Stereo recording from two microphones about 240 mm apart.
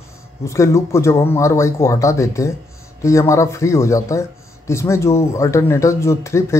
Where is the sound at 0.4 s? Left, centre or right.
Centre.